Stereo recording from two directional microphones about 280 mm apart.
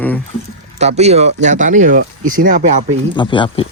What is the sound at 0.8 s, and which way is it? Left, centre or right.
Speech, right.